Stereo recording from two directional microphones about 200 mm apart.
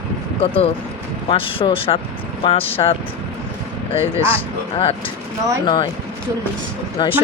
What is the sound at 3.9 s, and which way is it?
Speech, 25° left (ahead or behind).